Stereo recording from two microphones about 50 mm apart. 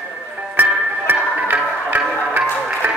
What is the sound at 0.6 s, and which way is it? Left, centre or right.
Music, right.